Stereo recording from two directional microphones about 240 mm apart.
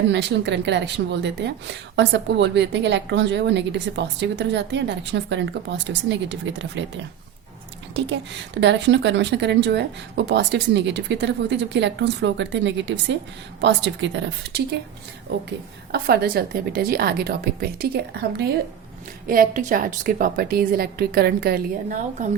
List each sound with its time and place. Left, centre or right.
0.1 s a woman's voice: right
15.9 s a woman's voice: right